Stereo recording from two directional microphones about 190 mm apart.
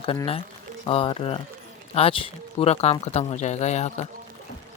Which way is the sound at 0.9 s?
30° left (ahead or behind).